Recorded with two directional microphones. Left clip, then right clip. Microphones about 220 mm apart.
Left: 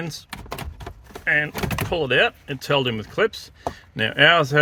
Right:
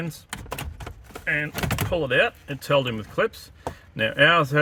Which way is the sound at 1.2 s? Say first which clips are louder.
Left 5 dB; 50° left (ahead or behind).